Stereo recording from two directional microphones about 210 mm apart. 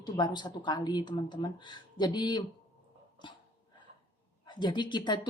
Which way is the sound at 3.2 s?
20° left (ahead or behind).